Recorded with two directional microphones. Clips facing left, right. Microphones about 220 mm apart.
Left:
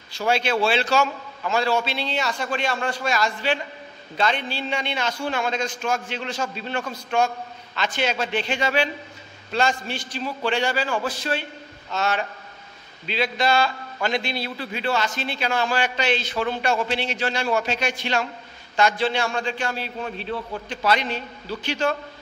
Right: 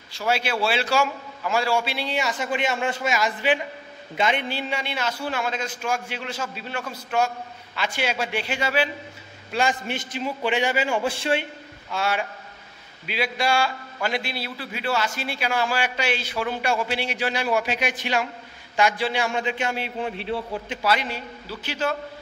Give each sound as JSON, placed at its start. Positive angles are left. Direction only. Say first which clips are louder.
{"t": 0.3, "sound": "a man's voice", "louder": "left 2 dB", "side_deg": -5}
{"t": 11.9, "sound": "a man's voice", "louder": "left 1 dB", "side_deg": -10}
{"t": 20.7, "sound": "a man's voice", "louder": "left 2 dB", "side_deg": -5}